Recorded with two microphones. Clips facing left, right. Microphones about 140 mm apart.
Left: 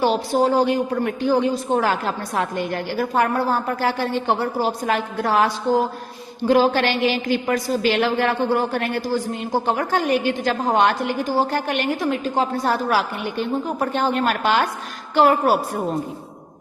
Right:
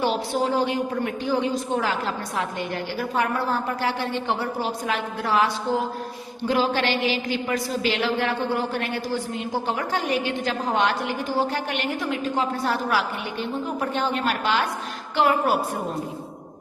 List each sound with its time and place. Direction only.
0.0 s a woman's voice: 40° left (ahead or behind)
6.5 s a woman's voice: 50° left (ahead or behind)